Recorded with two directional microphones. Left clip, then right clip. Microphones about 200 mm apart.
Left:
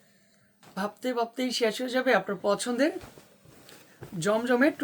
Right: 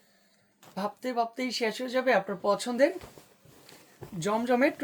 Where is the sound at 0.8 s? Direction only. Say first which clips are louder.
Even; 20° left (ahead or behind).